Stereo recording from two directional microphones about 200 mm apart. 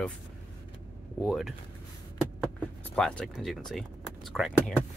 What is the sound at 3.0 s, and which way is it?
Speech, 5° left (ahead or behind).